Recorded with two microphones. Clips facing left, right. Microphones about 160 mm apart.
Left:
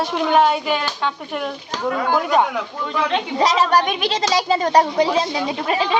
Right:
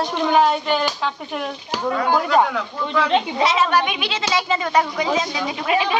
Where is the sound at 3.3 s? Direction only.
40° left (ahead or behind).